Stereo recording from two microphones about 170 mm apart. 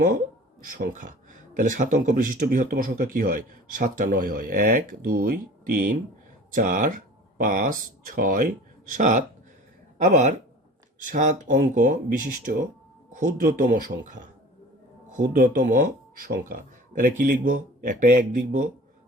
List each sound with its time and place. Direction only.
0.7 s speech: 50° right (ahead or behind)